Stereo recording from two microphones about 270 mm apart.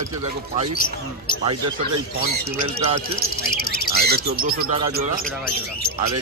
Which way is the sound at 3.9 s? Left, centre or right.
Right.